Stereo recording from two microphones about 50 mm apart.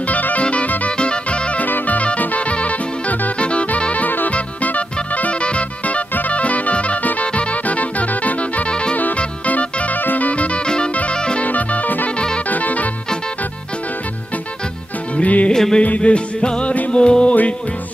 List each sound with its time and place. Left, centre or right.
0.0 s music: left
8.9 s music: left
11.4 s music: left
15.1 s music: left
15.5 s music: centre
15.8 s music: left